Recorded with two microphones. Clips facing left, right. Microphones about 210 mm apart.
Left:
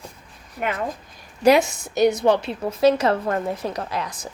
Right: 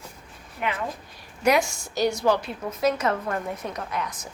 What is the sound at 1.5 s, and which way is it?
A woman's voice, 20° left (ahead or behind).